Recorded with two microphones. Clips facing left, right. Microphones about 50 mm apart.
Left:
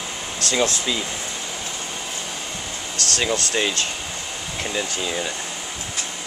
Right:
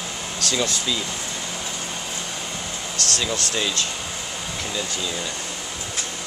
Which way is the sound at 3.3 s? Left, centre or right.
Left.